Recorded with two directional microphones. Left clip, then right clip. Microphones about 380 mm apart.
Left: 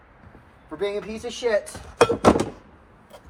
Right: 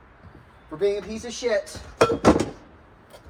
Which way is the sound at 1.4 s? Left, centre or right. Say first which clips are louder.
Left 1 dB; centre.